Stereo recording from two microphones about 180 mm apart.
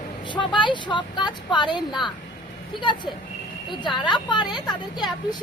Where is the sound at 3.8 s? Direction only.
25° left (ahead or behind).